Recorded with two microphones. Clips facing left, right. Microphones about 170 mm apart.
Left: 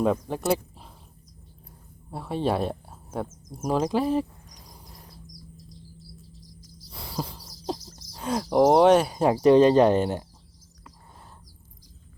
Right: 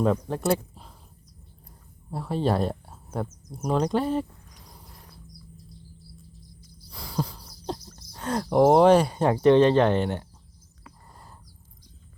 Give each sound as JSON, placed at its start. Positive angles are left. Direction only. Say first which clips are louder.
{"t": 0.0, "sound": "speech", "louder": "even", "side_deg": 5}
{"t": 2.0, "sound": "speech", "louder": "right 1 dB", "side_deg": 0}
{"t": 4.5, "sound": "bird", "louder": "left 1 dB", "side_deg": 15}
{"t": 5.1, "sound": "bird", "louder": "left 2 dB", "side_deg": 90}
{"t": 6.2, "sound": "a sound", "louder": "left 2 dB", "side_deg": 90}
{"t": 6.9, "sound": "a sound", "louder": "right 3 dB", "side_deg": 5}
{"t": 8.1, "sound": "speech", "louder": "even", "side_deg": 5}